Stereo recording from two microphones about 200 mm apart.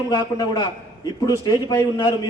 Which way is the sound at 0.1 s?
20° left (ahead or behind).